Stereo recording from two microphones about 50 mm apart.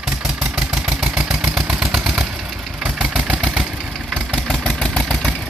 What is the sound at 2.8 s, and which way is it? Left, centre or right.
Vehicle, right.